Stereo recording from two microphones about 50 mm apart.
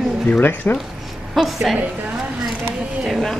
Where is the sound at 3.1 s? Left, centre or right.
Centre.